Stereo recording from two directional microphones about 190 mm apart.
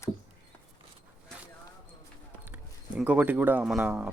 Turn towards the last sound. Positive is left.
turn(degrees=-5)  # may be behind; listen again after turning